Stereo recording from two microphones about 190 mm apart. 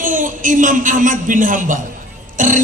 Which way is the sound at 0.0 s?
45° right (ahead or behind).